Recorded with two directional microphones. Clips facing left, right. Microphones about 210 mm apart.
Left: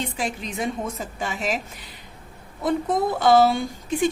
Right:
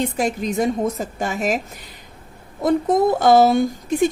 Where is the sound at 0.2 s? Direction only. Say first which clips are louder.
Right 7 dB; 45° right (ahead or behind).